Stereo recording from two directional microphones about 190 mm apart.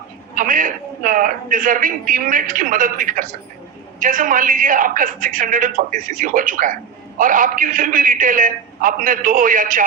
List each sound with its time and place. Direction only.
0.3 s a man's voice: 45° right (ahead or behind)